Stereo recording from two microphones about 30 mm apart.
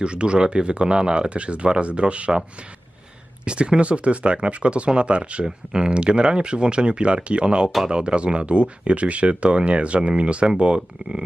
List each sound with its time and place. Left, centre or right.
0.0 s speech: right
3.4 s speech: right